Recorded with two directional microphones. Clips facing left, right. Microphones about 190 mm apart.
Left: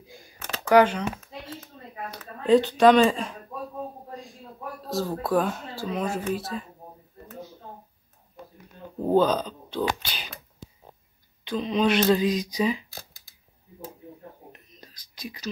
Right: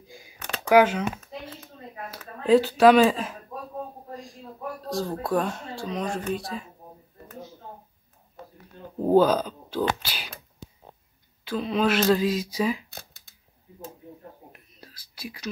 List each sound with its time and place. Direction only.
0.1 s a sound: 5° right (ahead or behind)
2.0 s speech: 5° right (ahead or behind)
4.8 s speech: centre (ahead or behind)
9.0 s speech: 10° right (ahead or behind)
10.0 s a sound: 10° right (ahead or behind)
11.4 s speech: 5° right (ahead or behind)
14.5 s whispering: 5° right (ahead or behind)